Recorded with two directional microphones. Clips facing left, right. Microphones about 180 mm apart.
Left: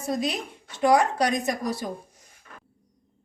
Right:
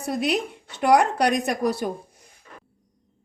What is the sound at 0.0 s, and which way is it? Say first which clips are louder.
Speech: right 3 dB; 65° right (ahead or behind).